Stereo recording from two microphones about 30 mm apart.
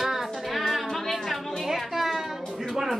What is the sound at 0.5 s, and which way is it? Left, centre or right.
Music, centre.